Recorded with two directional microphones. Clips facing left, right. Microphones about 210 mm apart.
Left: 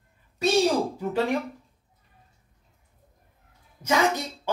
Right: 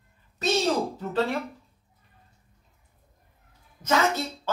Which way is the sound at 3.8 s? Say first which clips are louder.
Left 1 dB; 10° left (ahead or behind).